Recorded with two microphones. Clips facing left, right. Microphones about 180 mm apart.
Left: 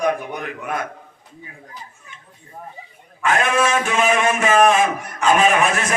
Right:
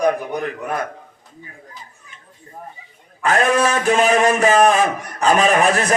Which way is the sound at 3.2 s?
35° right (ahead or behind).